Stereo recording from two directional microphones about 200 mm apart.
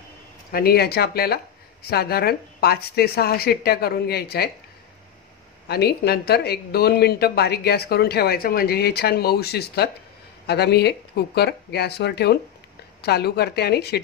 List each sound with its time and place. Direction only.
0.5 s speech: 50° left (ahead or behind)
5.7 s speech: 55° left (ahead or behind)